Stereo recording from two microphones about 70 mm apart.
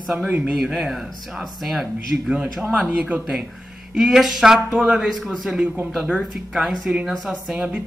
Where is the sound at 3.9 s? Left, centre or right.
Centre.